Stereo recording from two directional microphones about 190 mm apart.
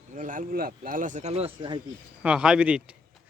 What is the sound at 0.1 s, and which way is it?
Speech, 40° right (ahead or behind).